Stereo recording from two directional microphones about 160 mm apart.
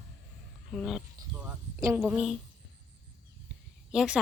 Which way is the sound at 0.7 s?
Centre (ahead or behind).